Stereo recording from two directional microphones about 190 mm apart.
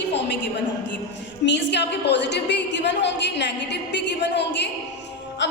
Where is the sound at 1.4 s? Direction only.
65° left (ahead or behind).